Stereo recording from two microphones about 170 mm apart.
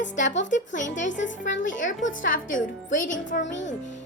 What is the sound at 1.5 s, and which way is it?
Speech, 90° left.